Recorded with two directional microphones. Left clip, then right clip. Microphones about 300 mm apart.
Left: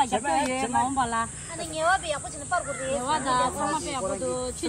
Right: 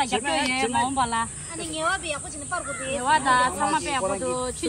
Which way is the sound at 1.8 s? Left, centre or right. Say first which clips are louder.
Left 2 dB; centre.